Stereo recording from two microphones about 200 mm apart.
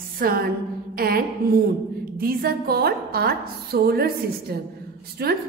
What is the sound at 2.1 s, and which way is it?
A woman's voice, 50° right (ahead or behind).